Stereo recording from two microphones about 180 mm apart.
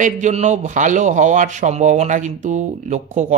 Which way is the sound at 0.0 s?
40° right (ahead or behind).